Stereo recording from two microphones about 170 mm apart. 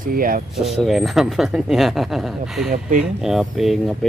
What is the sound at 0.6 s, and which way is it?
Speech, centre (ahead or behind).